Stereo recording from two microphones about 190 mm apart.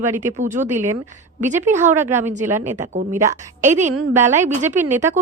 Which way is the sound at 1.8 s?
10° right (ahead or behind).